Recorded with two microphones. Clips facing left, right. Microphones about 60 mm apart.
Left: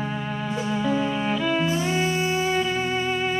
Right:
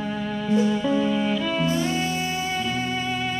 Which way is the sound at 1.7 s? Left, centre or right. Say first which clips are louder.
Even; left.